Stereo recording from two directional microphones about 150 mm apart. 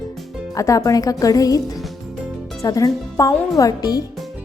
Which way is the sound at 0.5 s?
20° left (ahead or behind).